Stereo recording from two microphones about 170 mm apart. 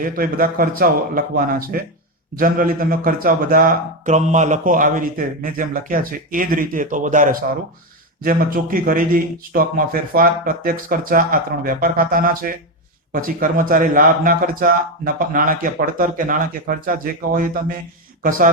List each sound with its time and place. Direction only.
0.0 s speech: 55° right (ahead or behind)